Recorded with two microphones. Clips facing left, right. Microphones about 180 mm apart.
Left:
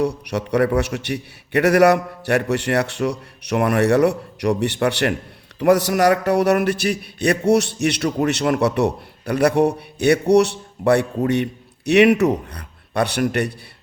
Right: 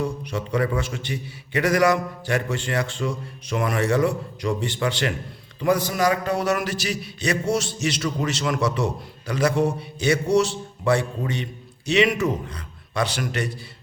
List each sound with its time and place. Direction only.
0.0 s a man's voice: 70° left (ahead or behind)